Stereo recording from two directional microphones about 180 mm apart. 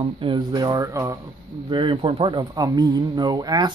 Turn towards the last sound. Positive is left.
turn(degrees=-20)  # may be behind; listen again after turning